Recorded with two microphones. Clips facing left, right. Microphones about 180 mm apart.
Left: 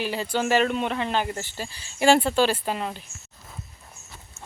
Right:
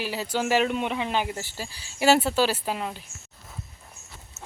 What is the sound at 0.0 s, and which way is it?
Speech, 5° right (ahead or behind).